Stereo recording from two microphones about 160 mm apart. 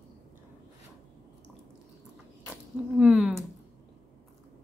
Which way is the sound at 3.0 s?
5° right (ahead or behind).